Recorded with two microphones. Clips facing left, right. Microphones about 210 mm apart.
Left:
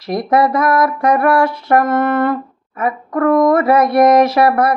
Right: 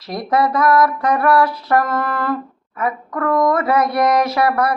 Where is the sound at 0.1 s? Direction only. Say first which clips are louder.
Left 4 dB; 25° left (ahead or behind).